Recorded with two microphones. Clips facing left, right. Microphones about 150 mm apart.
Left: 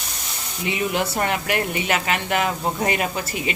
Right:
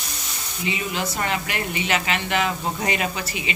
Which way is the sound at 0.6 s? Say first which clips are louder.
Left 4 dB; 55° left (ahead or behind).